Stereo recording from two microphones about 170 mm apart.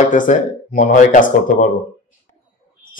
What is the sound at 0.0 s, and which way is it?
A man's voice, 50° left (ahead or behind).